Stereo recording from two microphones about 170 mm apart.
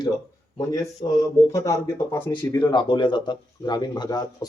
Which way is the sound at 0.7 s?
20° left (ahead or behind).